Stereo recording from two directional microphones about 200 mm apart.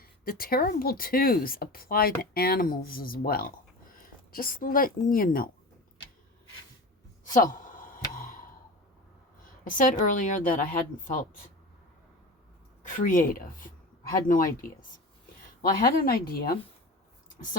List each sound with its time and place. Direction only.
0.3 s speech: 45° left (ahead or behind)
7.3 s a sound: 40° left (ahead or behind)
8.1 s sigh: 45° left (ahead or behind)
9.6 s speech: 40° left (ahead or behind)
12.8 s speech: 40° left (ahead or behind)
16.0 s speech: 50° left (ahead or behind)